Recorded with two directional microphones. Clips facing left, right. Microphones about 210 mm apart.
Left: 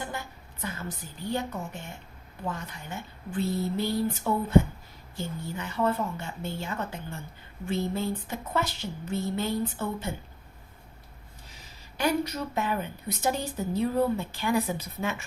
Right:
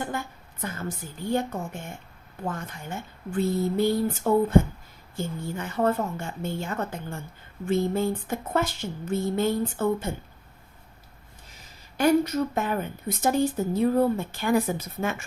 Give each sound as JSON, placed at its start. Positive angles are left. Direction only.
{"t": 0.0, "sound": "a sound", "side_deg": -50}
{"t": 2.5, "sound": "a woman's voice", "side_deg": -50}
{"t": 11.9, "sound": "a woman's voice", "side_deg": -50}